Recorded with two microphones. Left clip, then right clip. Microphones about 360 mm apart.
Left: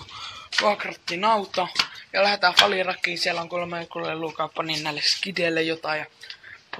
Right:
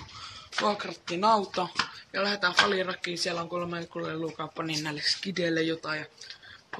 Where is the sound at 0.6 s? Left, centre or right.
Centre.